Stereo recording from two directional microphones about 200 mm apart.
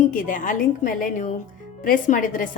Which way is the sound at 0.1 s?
40° left (ahead or behind).